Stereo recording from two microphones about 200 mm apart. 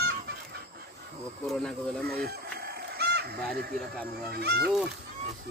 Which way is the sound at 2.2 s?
50° right (ahead or behind).